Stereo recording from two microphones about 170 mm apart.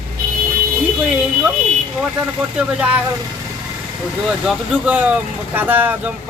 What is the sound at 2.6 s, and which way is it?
Speech, 5° right (ahead or behind).